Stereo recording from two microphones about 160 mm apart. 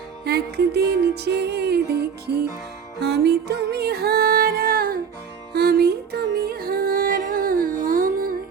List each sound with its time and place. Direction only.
0.3 s music: 90° right; by 8.4 s 60° right (ahead or behind)